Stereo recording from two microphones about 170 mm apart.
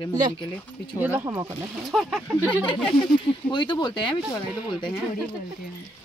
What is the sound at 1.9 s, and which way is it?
Speech, 5° right (ahead or behind).